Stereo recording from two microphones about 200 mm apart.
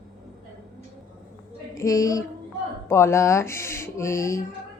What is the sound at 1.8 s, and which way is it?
Speech, 15° left (ahead or behind).